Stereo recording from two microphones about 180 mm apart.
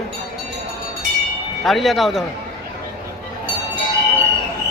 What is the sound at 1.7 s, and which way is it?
Speech, centre (ahead or behind).